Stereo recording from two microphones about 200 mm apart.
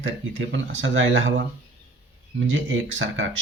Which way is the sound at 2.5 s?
70° right (ahead or behind).